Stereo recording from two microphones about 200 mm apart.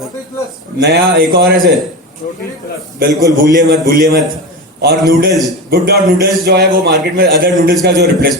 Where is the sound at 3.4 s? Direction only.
45° right (ahead or behind).